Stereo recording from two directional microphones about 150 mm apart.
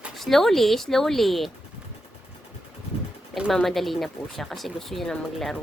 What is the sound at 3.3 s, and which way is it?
Speech, centre (ahead or behind).